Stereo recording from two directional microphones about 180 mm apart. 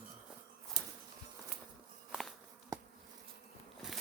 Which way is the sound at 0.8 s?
20° right (ahead or behind).